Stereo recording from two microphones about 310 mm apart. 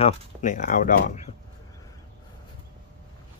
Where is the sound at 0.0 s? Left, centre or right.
Left.